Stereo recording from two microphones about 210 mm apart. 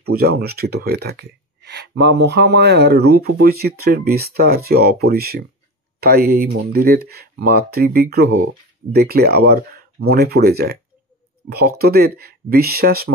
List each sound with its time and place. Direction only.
0.1 s speech: 45° right (ahead or behind)